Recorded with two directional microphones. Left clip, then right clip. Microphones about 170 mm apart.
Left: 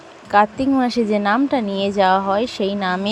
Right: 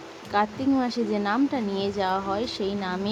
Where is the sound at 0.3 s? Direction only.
30° left (ahead or behind).